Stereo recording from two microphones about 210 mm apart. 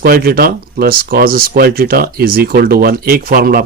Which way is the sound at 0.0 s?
45° right (ahead or behind).